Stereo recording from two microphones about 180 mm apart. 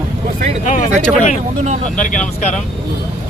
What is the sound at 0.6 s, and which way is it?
Speech, 40° left (ahead or behind).